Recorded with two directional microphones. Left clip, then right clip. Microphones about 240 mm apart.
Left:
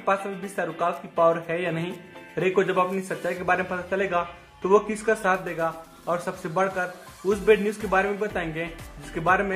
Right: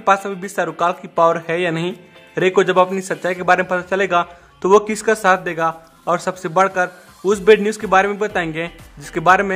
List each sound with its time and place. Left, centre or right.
0.0 s a man's voice: right